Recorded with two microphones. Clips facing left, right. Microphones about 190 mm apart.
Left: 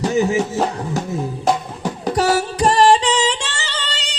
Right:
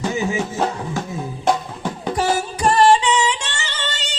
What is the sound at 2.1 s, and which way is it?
Music, 40° left (ahead or behind).